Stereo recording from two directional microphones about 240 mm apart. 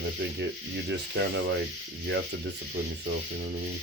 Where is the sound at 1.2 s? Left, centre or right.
Right.